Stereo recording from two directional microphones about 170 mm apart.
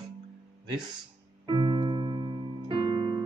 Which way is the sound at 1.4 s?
30° right (ahead or behind).